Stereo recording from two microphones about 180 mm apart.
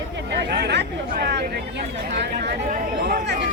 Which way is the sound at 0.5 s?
70° right (ahead or behind).